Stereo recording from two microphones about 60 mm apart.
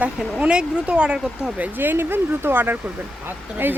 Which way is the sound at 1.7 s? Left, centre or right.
Right.